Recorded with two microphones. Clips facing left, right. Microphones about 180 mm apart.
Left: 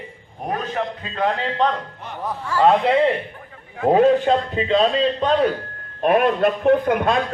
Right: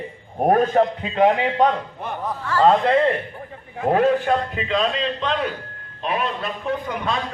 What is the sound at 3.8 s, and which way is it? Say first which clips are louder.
A man's voice: left 3 dB; 25° left (ahead or behind).